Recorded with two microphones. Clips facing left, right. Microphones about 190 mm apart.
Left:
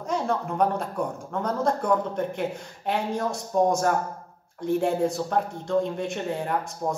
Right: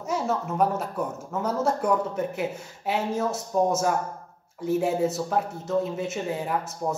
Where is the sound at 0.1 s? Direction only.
5° right (ahead or behind).